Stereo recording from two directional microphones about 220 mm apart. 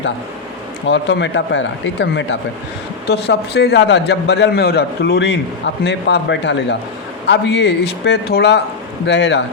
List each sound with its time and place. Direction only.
0.9 s a man's voice: 50° left (ahead or behind)